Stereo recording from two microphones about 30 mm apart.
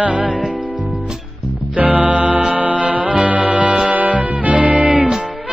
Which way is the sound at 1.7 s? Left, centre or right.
Right.